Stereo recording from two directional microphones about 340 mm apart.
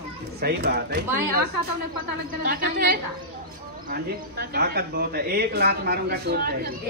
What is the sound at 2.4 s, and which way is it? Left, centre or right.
Speech, right.